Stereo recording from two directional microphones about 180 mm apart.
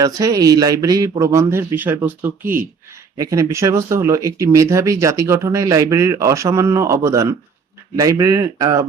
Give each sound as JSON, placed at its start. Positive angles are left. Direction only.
{"t": 0.0, "sound": "speech", "side_deg": -20}